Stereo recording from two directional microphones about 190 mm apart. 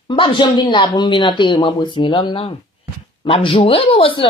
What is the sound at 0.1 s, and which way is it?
A man's voice, 25° left (ahead or behind).